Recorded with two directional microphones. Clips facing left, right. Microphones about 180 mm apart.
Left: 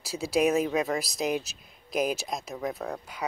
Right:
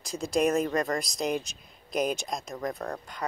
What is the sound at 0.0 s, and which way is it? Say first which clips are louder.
Speech: left 1 dB; 5° left (ahead or behind).